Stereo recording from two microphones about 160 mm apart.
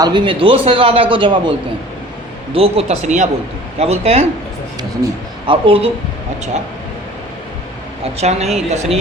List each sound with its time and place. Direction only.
0.0 s a man's voice: 30° right (ahead or behind)
5.5 s a man's voice: 35° right (ahead or behind)
8.0 s a woman's voice: 40° right (ahead or behind)